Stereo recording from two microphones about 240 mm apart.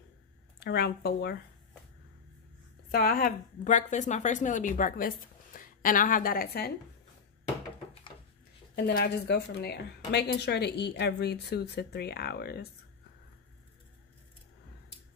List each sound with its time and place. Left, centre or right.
0.6 s a woman's voice: left
2.9 s a woman's voice: left
8.7 s speech: left